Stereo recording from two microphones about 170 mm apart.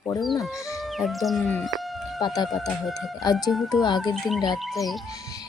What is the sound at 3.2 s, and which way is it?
Speech, 25° left (ahead or behind).